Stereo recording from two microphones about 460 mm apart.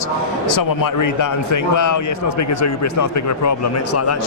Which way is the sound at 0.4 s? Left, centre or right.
Left.